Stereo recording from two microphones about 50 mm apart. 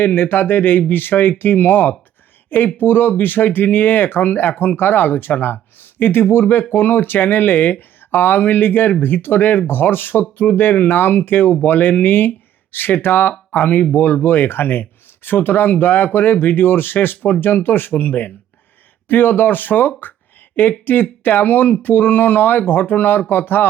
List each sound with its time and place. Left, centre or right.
0.0 s speech: left
13.6 s speech: left
13.9 s speech: left